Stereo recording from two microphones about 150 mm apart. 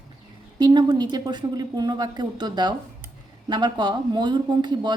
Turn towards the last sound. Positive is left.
turn(degrees=-30)  # may be behind; listen again after turning